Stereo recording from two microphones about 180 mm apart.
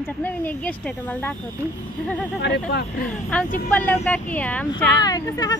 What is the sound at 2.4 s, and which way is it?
Speech, 65° left (ahead or behind).